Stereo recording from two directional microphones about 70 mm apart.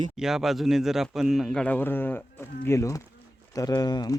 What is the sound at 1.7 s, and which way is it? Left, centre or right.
Speech, left.